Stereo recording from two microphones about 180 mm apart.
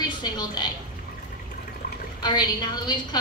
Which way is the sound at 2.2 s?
25° left (ahead or behind).